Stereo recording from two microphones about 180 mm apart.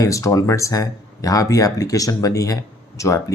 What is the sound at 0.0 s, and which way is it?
Speech, 15° left (ahead or behind).